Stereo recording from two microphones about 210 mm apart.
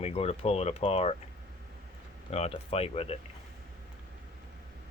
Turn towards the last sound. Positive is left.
turn(degrees=30)  # may be behind; listen again after turning